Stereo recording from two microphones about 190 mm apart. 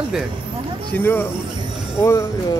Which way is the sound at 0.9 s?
10° left (ahead or behind).